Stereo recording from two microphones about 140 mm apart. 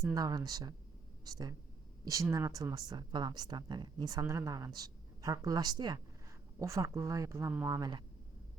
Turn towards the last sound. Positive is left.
turn(degrees=-25)  # may be behind; listen again after turning